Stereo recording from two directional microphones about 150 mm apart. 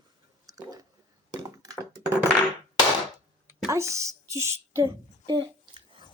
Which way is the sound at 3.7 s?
20° right (ahead or behind).